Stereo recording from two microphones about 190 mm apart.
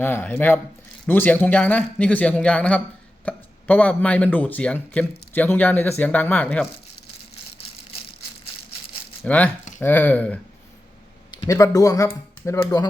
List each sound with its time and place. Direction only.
0.0 s speech: 10° left (ahead or behind)
9.2 s speech: 5° left (ahead or behind)
11.3 s speech: 20° left (ahead or behind)